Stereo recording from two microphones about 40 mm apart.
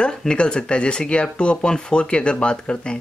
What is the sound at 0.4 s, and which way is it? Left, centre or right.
Speech, left.